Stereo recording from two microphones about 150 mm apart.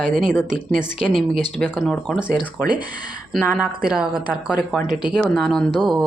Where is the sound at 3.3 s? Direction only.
Centre (ahead or behind).